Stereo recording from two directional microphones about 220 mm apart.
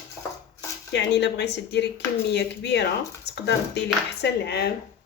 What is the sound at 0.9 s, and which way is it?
Speech, 50° left (ahead or behind).